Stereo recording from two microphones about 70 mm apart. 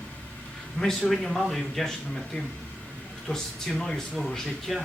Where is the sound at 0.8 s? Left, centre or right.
Centre.